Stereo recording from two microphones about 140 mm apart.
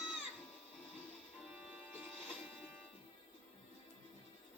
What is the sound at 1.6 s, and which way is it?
Music, 10° right (ahead or behind).